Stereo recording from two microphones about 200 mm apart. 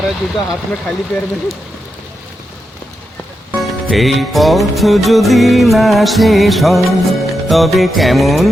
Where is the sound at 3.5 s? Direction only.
Centre (ahead or behind).